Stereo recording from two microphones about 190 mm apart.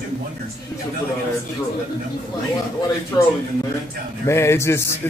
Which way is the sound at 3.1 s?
15° left (ahead or behind).